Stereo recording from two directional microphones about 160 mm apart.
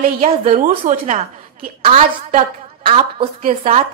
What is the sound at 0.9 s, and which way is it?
A woman's voice, 50° right (ahead or behind).